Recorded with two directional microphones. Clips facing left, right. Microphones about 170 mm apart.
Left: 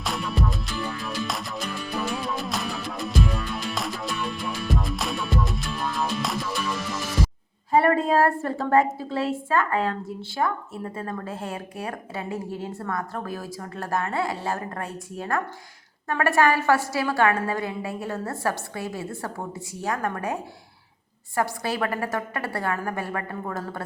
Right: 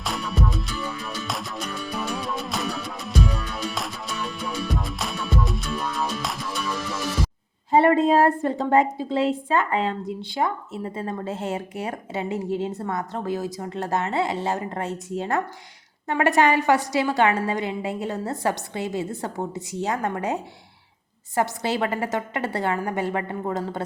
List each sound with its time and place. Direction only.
0.0 s music: centre (ahead or behind)
7.7 s a woman's voice: 25° right (ahead or behind)